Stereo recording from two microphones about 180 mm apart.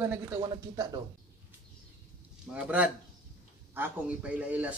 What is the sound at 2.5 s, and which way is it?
Speech, 5° right (ahead or behind).